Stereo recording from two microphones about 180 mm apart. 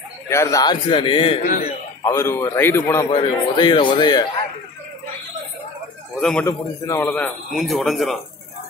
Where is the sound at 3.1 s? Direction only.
25° left (ahead or behind).